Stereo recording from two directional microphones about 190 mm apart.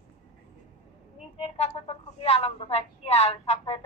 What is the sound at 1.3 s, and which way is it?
A woman's voice, 30° left (ahead or behind).